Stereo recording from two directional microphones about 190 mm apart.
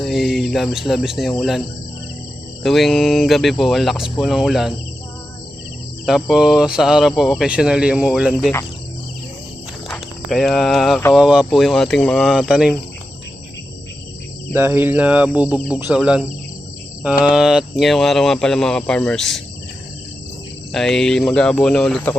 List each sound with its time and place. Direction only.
0.0 s speech: centre (ahead or behind)
2.6 s speech: centre (ahead or behind)
6.1 s speech: centre (ahead or behind)
9.9 s speech: centre (ahead or behind)
14.5 s cricket: 10° right (ahead or behind)
15.9 s speech: 5° right (ahead or behind)
17.2 s speech: 5° right (ahead or behind)
20.7 s speech: centre (ahead or behind)